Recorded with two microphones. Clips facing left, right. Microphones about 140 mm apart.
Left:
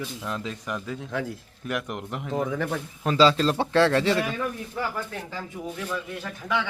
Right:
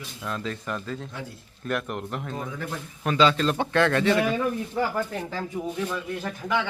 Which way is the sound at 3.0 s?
30° left (ahead or behind).